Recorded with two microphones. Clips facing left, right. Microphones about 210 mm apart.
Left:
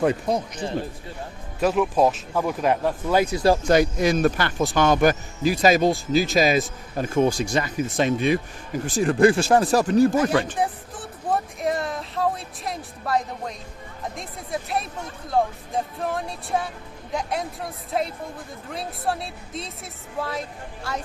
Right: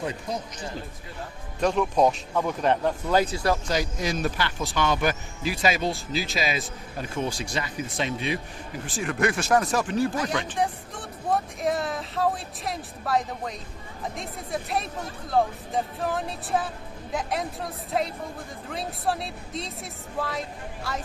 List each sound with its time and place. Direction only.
0.0 s speech: 60° left (ahead or behind)
1.6 s speech: 5° left (ahead or behind)
3.7 s speech: 55° left (ahead or behind)
8.9 s speech: 35° left (ahead or behind)
10.5 s speech: 5° left (ahead or behind)
18.7 s speech: centre (ahead or behind)